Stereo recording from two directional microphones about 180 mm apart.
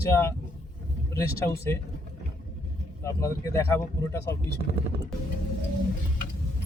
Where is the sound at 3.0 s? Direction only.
15° left (ahead or behind).